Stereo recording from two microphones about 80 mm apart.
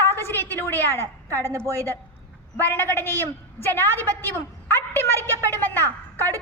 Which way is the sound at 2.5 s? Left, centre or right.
Left.